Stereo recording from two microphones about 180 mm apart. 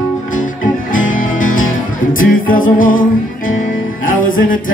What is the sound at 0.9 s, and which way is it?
Music, 90° left.